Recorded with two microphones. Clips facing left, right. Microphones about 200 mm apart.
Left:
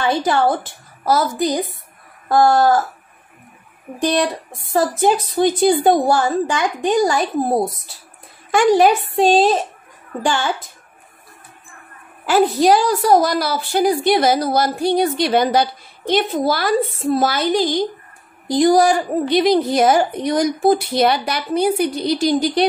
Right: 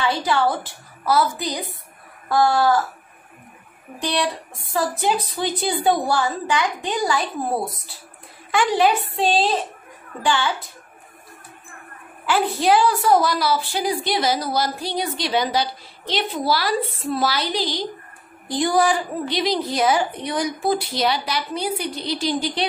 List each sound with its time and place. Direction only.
0.0 s a woman's voice: 45° left (ahead or behind)
4.0 s a woman's voice: 45° left (ahead or behind)
12.3 s a woman's voice: 40° left (ahead or behind)
18.9 s a woman's voice: 50° left (ahead or behind)